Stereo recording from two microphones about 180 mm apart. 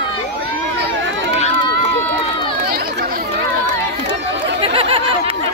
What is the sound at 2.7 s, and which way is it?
Chatter, 55° right (ahead or behind).